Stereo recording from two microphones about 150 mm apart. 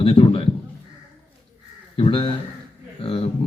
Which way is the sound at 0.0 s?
35° left (ahead or behind).